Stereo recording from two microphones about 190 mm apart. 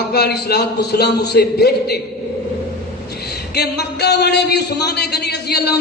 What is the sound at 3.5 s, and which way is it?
A man's voice, 60° left (ahead or behind).